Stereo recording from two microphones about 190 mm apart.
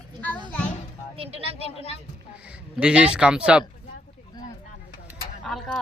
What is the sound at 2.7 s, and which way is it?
Speech, 5° right (ahead or behind).